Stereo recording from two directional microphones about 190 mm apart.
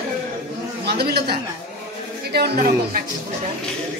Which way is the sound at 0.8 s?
60° right (ahead or behind).